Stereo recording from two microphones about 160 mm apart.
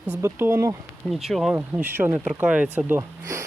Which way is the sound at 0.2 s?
15° right (ahead or behind).